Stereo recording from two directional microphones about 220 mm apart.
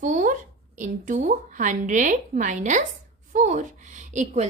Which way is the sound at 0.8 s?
35° right (ahead or behind).